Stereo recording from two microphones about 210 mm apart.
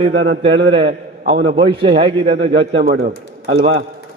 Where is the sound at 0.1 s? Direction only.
60° right (ahead or behind).